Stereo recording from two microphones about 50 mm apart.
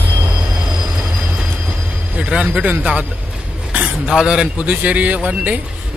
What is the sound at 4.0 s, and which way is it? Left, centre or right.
Speech, centre.